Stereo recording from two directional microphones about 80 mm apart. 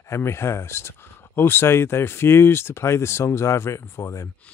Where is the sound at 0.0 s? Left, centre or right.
Left.